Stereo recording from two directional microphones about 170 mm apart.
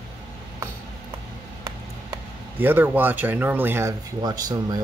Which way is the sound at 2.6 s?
10° right (ahead or behind).